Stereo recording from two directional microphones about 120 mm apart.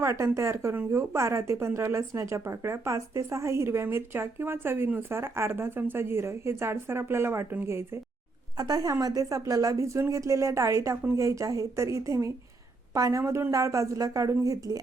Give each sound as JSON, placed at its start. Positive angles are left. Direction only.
{"t": 0.0, "sound": "speech", "side_deg": -25}
{"t": 8.5, "sound": "speech", "side_deg": -35}